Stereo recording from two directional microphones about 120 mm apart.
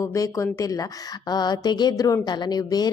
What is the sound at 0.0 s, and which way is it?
A woman's voice, 25° left (ahead or behind).